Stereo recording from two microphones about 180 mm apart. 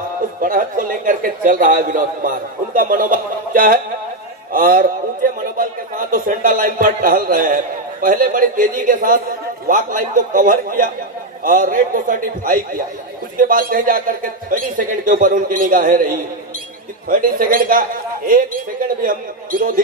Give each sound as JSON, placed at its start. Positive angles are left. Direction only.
{"t": 0.4, "sound": "a man's voice", "side_deg": -50}